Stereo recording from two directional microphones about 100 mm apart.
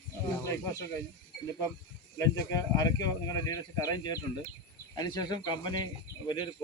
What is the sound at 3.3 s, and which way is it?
Speech, 35° left (ahead or behind).